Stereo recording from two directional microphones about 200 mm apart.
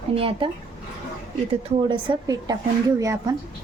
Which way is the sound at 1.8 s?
25° right (ahead or behind).